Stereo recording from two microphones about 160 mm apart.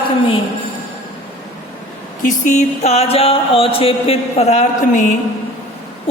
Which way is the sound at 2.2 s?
55° left (ahead or behind).